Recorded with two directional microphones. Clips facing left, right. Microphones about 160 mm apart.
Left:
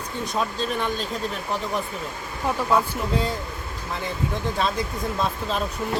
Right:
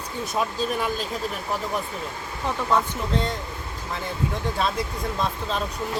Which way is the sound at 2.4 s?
5° left (ahead or behind).